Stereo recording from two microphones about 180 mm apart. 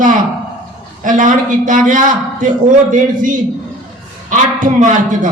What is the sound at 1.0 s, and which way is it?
A man's voice, 45° right (ahead or behind).